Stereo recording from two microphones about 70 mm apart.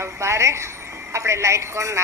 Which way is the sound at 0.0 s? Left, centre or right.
Right.